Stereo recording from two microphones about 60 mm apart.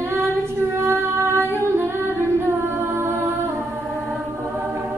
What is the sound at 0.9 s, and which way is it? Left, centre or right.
Singing, right.